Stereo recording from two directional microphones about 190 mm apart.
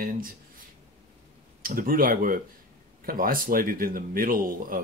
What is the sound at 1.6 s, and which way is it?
Speech, 50° right (ahead or behind).